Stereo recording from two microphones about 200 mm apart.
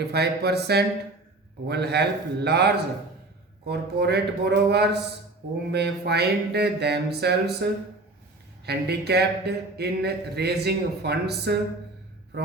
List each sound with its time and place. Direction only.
0.1 s speech: 55° right (ahead or behind)